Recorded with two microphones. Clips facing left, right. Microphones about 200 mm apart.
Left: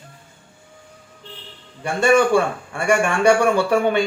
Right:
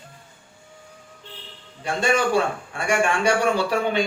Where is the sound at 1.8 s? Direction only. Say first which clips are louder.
Left 6 dB; 55° left (ahead or behind).